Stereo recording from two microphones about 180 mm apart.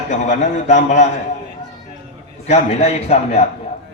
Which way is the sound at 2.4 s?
40° left (ahead or behind).